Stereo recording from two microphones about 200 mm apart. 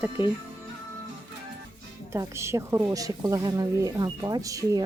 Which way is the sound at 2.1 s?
15° right (ahead or behind).